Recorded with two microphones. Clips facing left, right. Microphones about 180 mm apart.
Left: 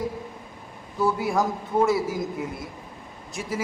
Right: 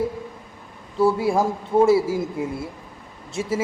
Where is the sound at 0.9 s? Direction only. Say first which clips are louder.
Right 4 dB; 30° right (ahead or behind).